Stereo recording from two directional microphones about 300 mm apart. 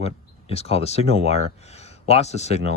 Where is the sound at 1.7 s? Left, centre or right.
Left.